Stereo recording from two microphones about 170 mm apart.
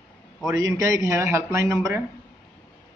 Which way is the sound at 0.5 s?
20° right (ahead or behind).